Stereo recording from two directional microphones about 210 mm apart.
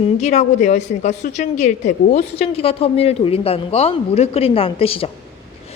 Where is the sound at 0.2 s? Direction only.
35° left (ahead or behind).